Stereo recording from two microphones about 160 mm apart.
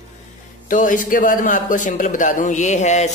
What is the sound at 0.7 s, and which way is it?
A man's voice, 55° left (ahead or behind).